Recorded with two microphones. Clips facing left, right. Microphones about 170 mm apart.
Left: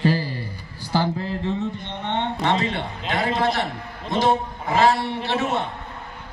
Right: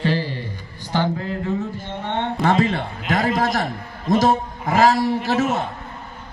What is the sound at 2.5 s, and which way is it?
Speech, 25° left (ahead or behind).